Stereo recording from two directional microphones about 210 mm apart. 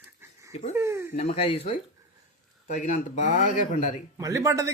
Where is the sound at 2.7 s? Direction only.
35° left (ahead or behind).